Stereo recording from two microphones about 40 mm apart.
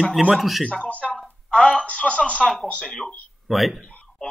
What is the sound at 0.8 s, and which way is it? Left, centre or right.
Speech, left.